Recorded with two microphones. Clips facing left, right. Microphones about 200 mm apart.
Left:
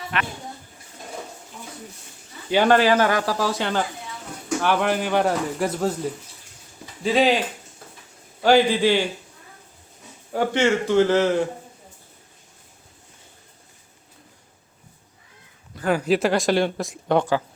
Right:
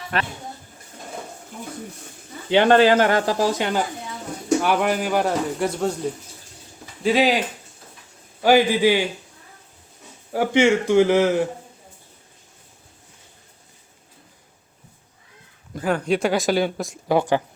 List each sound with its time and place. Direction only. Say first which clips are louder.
0.1 s speech: right 2 dB; 40° right (ahead or behind)
2.5 s speech: right 2 dB; 20° right (ahead or behind); by 5.9 s centre (ahead or behind)
7.0 s speech: even; centre (ahead or behind)
8.4 s a man's voice: right 1 dB; 10° right (ahead or behind)
10.3 s a man's voice: right 3 dB; 10° right (ahead or behind)
16.0 s speech: left 1 dB; centre (ahead or behind)